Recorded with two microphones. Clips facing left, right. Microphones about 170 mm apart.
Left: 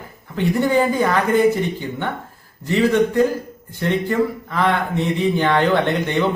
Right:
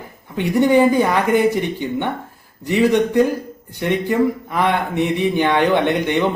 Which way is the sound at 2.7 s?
15° right (ahead or behind).